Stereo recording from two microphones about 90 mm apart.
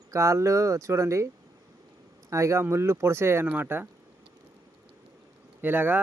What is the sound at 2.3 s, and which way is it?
Speech, 30° right (ahead or behind).